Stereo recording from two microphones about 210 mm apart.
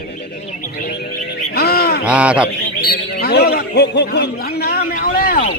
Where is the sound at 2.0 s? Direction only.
5° right (ahead or behind).